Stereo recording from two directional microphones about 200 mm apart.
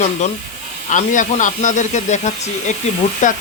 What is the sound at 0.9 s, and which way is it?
Speech, 40° left (ahead or behind).